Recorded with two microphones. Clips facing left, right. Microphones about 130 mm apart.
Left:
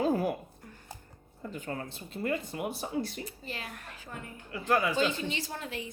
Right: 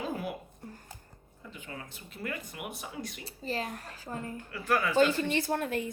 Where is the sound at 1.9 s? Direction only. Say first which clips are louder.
Left 6 dB; 30° left (ahead or behind).